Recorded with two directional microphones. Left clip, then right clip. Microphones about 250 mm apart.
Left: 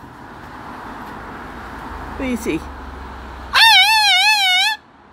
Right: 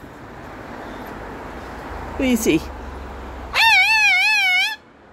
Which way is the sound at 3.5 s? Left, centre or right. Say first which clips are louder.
Left 4 dB; centre.